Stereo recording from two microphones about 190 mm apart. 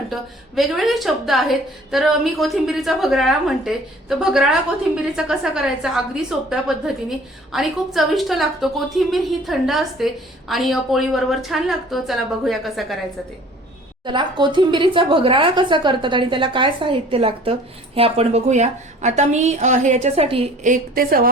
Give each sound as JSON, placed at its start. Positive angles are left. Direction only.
{"t": 0.1, "sound": "a woman's voice", "side_deg": 0}
{"t": 14.0, "sound": "speech", "side_deg": -25}
{"t": 20.7, "sound": "a woman's voice", "side_deg": -50}